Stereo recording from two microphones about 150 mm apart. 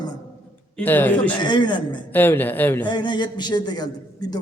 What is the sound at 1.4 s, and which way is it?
Speech, 30° left (ahead or behind).